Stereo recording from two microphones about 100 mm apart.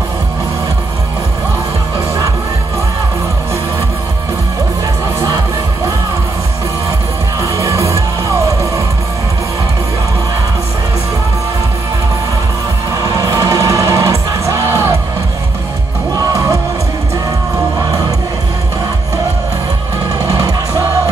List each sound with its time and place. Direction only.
7.3 s music: 30° right (ahead or behind)
12.9 s music: 35° right (ahead or behind)
20.2 s music: 35° right (ahead or behind)